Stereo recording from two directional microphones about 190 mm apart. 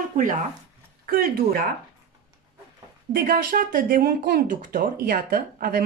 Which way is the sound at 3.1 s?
50° right (ahead or behind).